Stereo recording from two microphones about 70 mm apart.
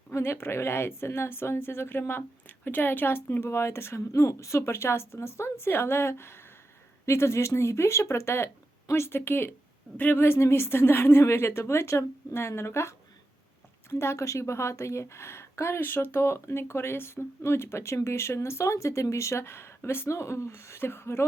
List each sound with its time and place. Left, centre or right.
0.1 s a woman's voice: left
14.0 s a woman's voice: left
15.8 s a woman's voice: left